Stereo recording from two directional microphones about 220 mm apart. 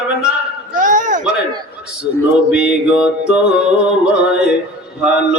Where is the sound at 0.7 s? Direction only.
35° right (ahead or behind).